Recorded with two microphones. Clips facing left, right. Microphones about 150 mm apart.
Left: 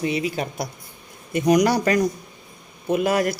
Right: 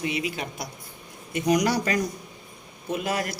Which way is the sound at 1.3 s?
50° left (ahead or behind).